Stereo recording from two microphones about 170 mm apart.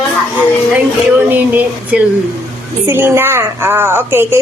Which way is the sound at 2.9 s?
15° right (ahead or behind).